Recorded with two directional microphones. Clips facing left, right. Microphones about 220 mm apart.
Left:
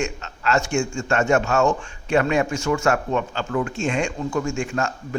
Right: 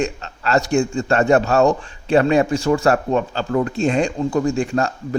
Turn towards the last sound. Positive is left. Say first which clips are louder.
# right 5 dB
turn(degrees=-35)  # may be behind; listen again after turning